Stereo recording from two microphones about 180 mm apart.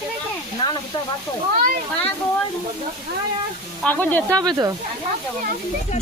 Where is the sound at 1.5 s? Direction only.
55° right (ahead or behind).